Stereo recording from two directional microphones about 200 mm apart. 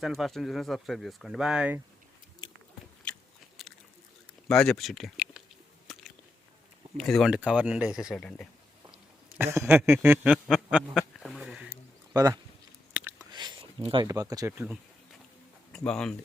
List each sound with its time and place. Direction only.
0.0 s speech: centre (ahead or behind)
3.1 s biting: 5° left (ahead or behind)
4.4 s speech: 5° left (ahead or behind)
5.9 s biting: centre (ahead or behind)
6.9 s speech: centre (ahead or behind)
9.4 s a sound: 10° right (ahead or behind)
12.1 s speech: 15° right (ahead or behind)
12.9 s a sound: 5° right (ahead or behind)
13.3 s speech: 20° right (ahead or behind)
15.7 s speech: 5° left (ahead or behind)